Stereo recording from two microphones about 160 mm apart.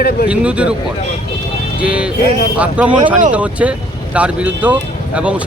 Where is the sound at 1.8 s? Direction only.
5° right (ahead or behind).